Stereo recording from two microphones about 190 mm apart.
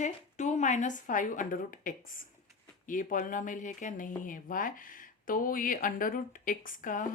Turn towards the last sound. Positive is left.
turn(degrees=45)  # may be behind; listen again after turning